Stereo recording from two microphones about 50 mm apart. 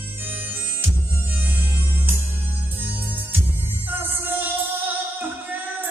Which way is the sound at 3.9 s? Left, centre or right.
Right.